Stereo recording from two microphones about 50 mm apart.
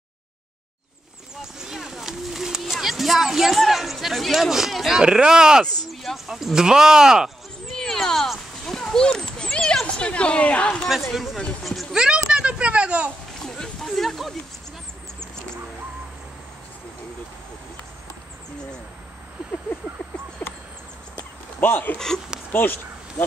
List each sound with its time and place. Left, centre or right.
1.3 s a sound: centre
4.5 s speech: centre
5.9 s speech: centre
7.7 s a sound: centre
9.9 s a woman's voice: left
11.6 s speech: centre
11.9 s a child's voice: centre
13.5 s a sound: centre
21.5 s speech: left
21.9 s speech: centre
22.5 s speech: left